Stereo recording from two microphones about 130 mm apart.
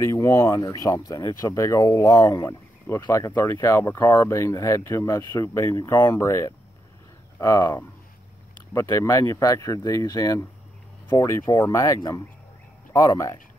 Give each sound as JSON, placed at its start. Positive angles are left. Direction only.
{"t": 0.0, "sound": "speech", "side_deg": 20}